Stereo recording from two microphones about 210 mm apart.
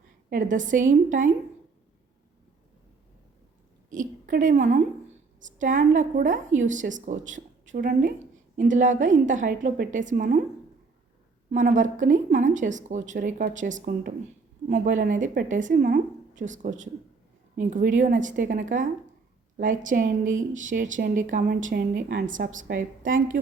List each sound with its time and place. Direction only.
0.3 s speech: 40° right (ahead or behind)
3.8 s a woman's voice: 40° right (ahead or behind)
11.5 s speech: 35° right (ahead or behind)